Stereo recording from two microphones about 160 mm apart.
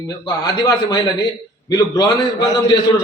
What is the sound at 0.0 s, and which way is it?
A man's voice, 25° left (ahead or behind).